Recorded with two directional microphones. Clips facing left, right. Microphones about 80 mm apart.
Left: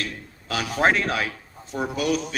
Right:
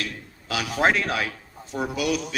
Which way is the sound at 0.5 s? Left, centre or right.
Left.